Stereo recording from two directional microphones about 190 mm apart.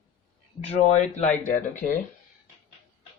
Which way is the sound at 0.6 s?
35° left (ahead or behind).